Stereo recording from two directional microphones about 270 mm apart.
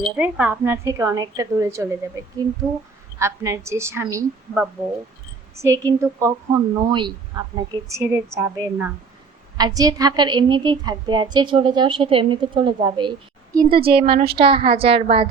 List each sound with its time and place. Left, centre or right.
0.2 s a woman's voice: centre